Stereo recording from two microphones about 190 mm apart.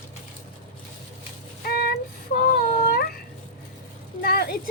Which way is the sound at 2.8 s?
50° left (ahead or behind).